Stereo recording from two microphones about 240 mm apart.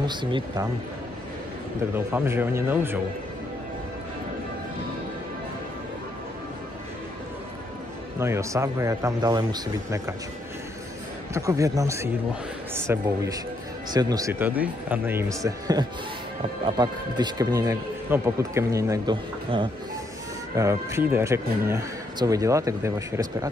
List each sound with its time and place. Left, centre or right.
0.0 s speech: centre
2.0 s speech: centre
8.2 s speech: centre
11.3 s speech: centre